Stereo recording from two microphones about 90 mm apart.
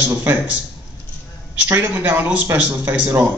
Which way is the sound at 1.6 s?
25° right (ahead or behind).